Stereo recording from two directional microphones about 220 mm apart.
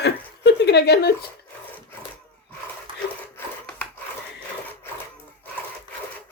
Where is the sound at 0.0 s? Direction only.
50° left (ahead or behind).